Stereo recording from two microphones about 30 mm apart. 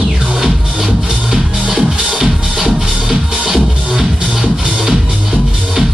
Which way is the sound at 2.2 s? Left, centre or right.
Centre.